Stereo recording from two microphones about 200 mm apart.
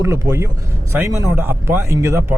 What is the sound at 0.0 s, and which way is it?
A man's voice, 15° right (ahead or behind).